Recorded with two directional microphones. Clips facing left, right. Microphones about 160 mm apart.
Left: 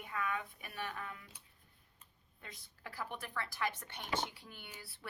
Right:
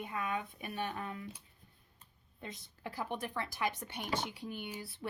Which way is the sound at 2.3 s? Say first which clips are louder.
Right 8 dB; 25° right (ahead or behind).